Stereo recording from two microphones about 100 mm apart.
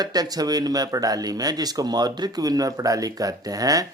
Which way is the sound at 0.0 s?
40° right (ahead or behind).